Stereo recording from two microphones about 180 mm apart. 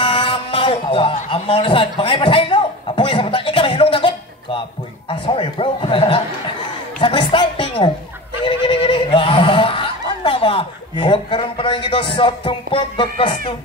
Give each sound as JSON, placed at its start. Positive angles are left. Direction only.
{"t": 0.0, "sound": "music", "side_deg": 30}
{"t": 1.3, "sound": "a man's voice", "side_deg": 30}
{"t": 7.0, "sound": "a sound", "side_deg": 25}